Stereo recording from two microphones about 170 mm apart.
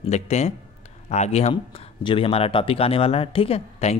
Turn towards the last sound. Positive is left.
turn(degrees=35)  # may be behind; listen again after turning